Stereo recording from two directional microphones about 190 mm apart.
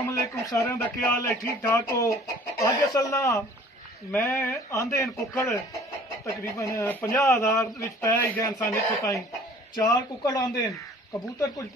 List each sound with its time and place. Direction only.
0.1 s speech: 15° left (ahead or behind)